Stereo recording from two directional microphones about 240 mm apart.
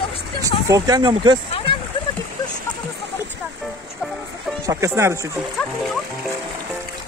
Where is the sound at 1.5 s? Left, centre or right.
Left.